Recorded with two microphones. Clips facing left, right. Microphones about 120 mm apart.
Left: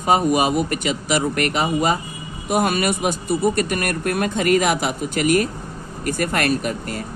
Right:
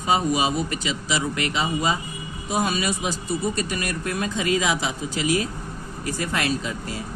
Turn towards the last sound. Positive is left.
turn(degrees=65)  # may be behind; listen again after turning